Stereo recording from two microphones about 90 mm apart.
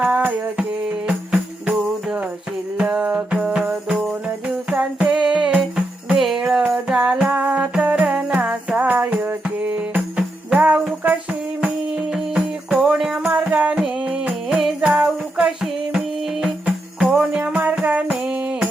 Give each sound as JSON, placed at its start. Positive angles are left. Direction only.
{"t": 0.0, "sound": "music", "side_deg": -15}
{"t": 10.2, "sound": "jingle bell", "side_deg": -15}
{"t": 12.1, "sound": "music", "side_deg": -10}